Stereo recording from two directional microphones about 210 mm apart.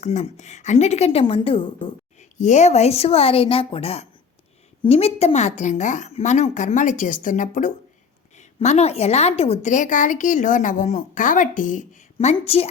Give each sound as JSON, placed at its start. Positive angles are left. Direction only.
{"t": 0.0, "sound": "a woman's voice", "side_deg": 35}